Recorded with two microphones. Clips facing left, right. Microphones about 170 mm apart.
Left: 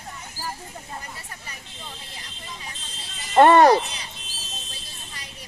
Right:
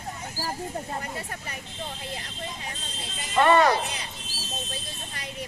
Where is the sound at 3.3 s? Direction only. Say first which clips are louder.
Left 6 dB; 50° left (ahead or behind).